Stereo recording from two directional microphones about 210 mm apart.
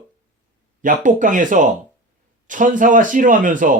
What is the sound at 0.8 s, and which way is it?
A man's voice, 40° right (ahead or behind).